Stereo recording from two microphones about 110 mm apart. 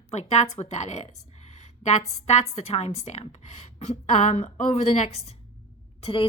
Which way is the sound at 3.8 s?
85° left.